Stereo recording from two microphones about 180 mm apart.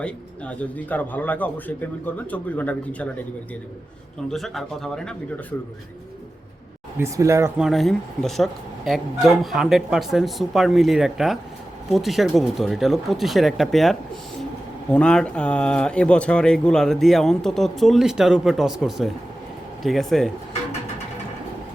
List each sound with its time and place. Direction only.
0.0 s speech: 5° left (ahead or behind)
4.3 s speech: centre (ahead or behind)
7.0 s speech: 15° right (ahead or behind)
7.6 s speech: centre (ahead or behind)